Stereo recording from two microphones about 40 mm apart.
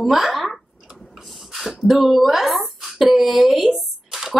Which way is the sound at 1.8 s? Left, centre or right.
Centre.